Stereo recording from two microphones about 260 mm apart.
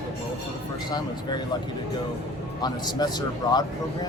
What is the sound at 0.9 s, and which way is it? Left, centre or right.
Speech, centre.